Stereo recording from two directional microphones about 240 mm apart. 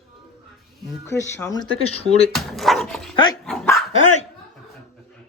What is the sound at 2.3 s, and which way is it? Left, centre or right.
Speech, centre.